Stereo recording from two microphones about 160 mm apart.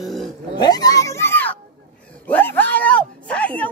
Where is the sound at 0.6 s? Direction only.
25° left (ahead or behind); by 3.6 s 10° left (ahead or behind).